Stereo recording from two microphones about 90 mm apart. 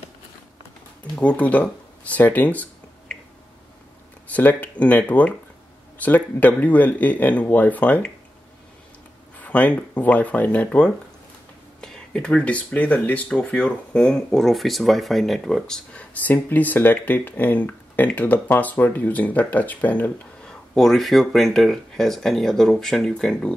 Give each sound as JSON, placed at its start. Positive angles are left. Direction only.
{"t": 1.1, "sound": "speech", "side_deg": 15}
{"t": 4.3, "sound": "speech", "side_deg": 15}
{"t": 9.4, "sound": "speech", "side_deg": 15}
{"t": 20.7, "sound": "speech", "side_deg": 5}